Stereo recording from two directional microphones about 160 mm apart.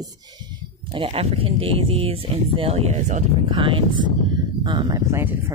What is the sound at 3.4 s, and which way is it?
Speech, 30° right (ahead or behind).